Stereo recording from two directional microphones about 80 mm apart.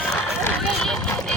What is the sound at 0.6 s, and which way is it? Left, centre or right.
Run, centre.